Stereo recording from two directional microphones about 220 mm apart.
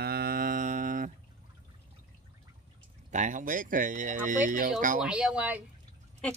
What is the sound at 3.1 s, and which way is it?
Speech, 35° right (ahead or behind).